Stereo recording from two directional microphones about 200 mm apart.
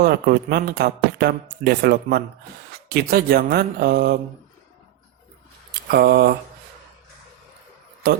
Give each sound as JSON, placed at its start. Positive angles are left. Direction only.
{"t": 0.0, "sound": "speech", "side_deg": -50}
{"t": 5.9, "sound": "speech", "side_deg": -55}